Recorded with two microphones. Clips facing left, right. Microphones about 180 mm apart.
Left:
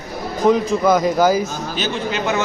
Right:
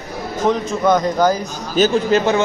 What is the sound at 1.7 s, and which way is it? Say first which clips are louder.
Speech: right 10 dB; 40° right (ahead or behind).